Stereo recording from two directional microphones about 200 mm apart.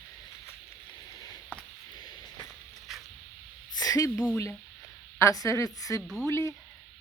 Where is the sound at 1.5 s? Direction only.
10° left (ahead or behind).